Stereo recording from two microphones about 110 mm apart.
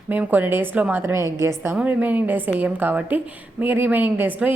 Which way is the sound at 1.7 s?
10° right (ahead or behind).